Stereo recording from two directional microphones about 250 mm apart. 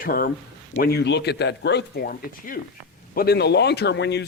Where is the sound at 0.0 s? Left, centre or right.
Left.